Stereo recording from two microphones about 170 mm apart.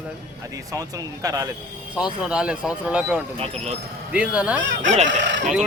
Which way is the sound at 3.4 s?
40° right (ahead or behind).